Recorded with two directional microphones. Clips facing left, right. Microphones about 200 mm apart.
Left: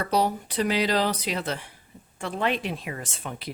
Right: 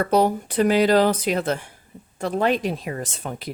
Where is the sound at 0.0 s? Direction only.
50° right (ahead or behind).